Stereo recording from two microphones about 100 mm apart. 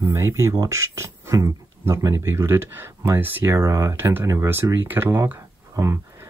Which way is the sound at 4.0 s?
20° right (ahead or behind).